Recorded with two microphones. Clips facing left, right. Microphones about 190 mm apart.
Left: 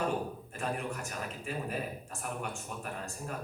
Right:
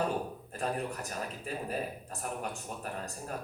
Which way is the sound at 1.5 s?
40° right (ahead or behind).